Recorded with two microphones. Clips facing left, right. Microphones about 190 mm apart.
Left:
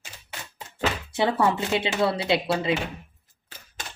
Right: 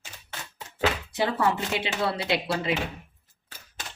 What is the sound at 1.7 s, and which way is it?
Speech, 25° left (ahead or behind).